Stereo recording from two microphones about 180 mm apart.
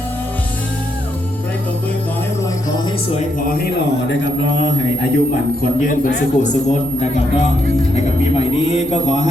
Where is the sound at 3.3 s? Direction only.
50° left (ahead or behind).